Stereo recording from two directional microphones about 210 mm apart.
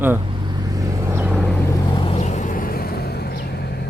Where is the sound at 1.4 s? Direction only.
15° left (ahead or behind).